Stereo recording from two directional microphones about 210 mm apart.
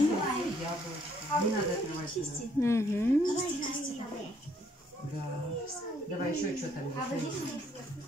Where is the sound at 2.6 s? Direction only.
15° left (ahead or behind).